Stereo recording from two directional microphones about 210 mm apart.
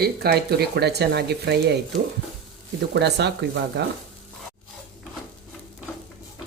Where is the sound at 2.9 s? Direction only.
55° right (ahead or behind).